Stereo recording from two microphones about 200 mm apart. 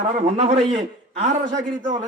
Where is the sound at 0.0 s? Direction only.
35° right (ahead or behind).